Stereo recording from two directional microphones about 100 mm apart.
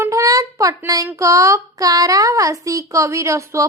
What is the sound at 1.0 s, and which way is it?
Speech, 30° right (ahead or behind).